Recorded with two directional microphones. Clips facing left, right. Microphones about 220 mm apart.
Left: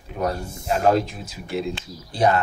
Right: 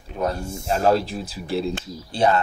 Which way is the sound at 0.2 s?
30° right (ahead or behind).